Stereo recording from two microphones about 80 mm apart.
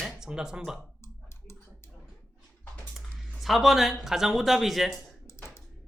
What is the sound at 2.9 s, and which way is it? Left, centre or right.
Speech, centre.